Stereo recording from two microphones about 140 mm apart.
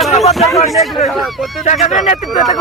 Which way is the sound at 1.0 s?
Centre (ahead or behind).